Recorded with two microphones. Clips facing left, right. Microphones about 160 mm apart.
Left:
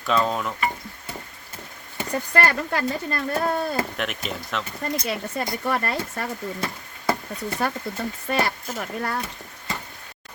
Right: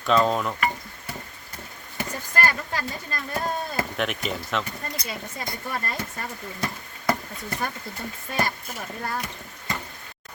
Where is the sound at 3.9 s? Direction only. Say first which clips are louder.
Right 2 dB; centre (ahead or behind).